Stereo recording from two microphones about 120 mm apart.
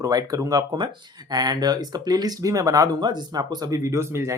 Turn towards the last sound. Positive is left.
turn(degrees=-25)  # may be behind; listen again after turning